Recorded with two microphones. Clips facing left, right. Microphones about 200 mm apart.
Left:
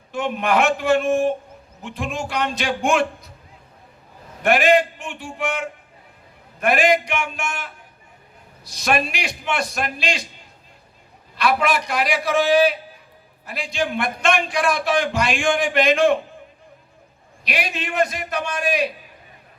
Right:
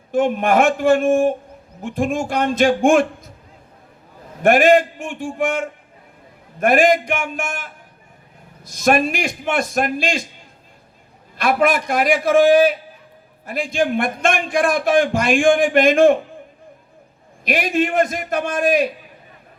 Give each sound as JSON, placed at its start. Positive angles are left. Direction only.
{"t": 0.1, "sound": "a man's voice", "side_deg": -50}
{"t": 4.4, "sound": "a man's voice", "side_deg": -50}
{"t": 11.3, "sound": "a man's voice", "side_deg": -50}
{"t": 17.4, "sound": "a man's voice", "side_deg": -50}